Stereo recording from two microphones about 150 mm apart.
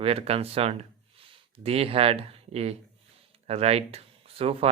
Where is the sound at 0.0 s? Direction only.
40° right (ahead or behind).